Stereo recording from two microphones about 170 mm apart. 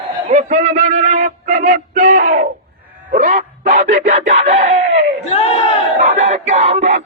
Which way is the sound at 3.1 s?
55° right (ahead or behind).